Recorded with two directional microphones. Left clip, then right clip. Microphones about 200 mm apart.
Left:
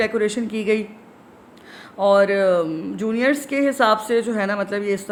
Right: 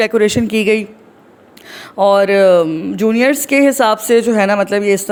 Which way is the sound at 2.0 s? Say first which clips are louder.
Right 6 dB; 40° right (ahead or behind).